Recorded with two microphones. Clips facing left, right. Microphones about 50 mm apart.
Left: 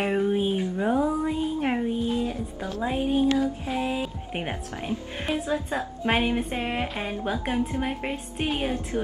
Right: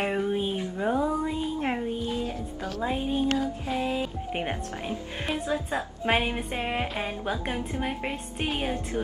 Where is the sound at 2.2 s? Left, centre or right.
Left.